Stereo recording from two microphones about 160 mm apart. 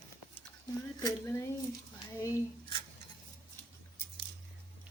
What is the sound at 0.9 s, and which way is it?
Speech, 20° left (ahead or behind).